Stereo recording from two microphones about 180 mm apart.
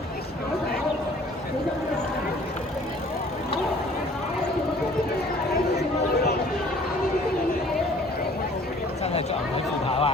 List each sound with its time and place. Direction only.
9.8 s chatter: 30° left (ahead or behind)